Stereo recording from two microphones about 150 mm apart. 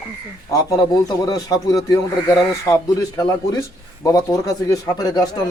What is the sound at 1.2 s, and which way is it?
Speech, 25° left (ahead or behind).